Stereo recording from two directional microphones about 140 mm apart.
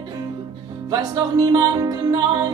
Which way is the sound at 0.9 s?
25° right (ahead or behind).